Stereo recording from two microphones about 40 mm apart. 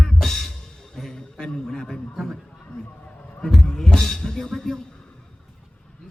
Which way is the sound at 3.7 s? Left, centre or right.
Centre.